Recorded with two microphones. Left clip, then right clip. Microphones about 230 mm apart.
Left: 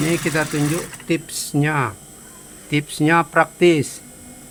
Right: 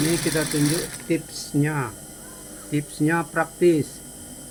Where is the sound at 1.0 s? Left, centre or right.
Left.